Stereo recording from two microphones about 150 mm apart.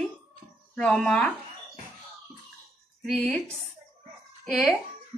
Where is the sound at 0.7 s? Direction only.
5° left (ahead or behind).